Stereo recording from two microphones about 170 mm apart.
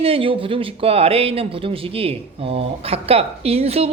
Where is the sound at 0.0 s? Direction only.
30° right (ahead or behind).